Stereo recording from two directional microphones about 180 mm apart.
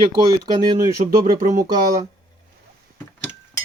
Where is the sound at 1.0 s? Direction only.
40° right (ahead or behind).